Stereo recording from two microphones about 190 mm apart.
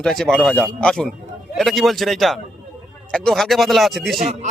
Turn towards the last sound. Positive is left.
turn(degrees=0)  # may be behind; listen again after turning